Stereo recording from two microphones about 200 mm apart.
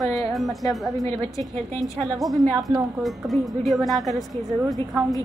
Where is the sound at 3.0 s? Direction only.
Centre (ahead or behind).